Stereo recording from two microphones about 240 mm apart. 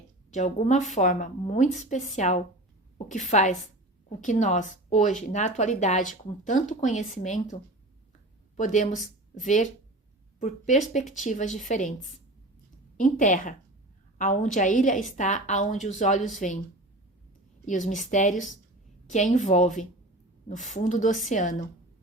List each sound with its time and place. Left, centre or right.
0.3 s a woman's voice: left
13.0 s speech: left
17.7 s a woman's voice: left